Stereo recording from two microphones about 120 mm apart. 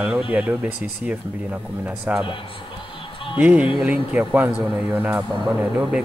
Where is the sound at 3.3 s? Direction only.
10° right (ahead or behind).